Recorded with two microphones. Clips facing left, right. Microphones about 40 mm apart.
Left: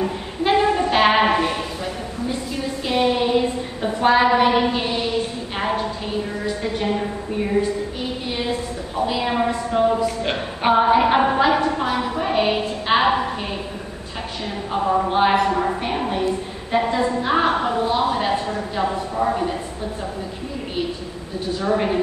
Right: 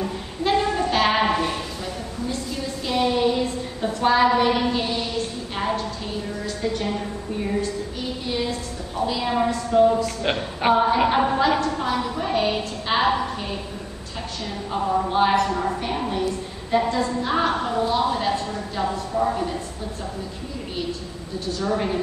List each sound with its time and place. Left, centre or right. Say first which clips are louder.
0.0 s a sound: left 3 dB; left
10.3 s a woman's voice: left 1 dB; centre
14.7 s a woman's voice: left 3 dB; centre
21.5 s a woman's voice: left 3 dB; left